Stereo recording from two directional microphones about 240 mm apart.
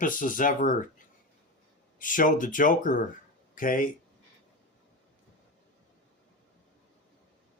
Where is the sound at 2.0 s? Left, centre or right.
Left.